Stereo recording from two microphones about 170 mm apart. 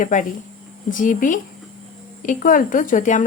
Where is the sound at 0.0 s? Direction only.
50° left (ahead or behind).